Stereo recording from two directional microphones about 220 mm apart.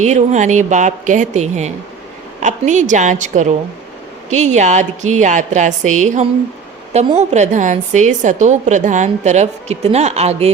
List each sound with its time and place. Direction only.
0.0 s a woman's voice: 30° right (ahead or behind)